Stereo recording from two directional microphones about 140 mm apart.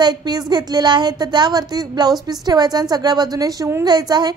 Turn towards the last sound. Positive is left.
turn(degrees=-30)  # may be behind; listen again after turning